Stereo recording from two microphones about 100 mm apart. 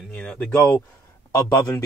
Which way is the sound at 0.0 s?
5° left (ahead or behind).